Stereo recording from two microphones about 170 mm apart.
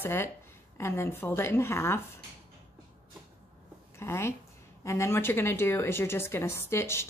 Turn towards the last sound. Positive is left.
turn(degrees=15)  # may be behind; listen again after turning